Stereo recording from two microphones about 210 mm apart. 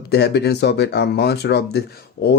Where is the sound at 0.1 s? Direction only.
50° left (ahead or behind).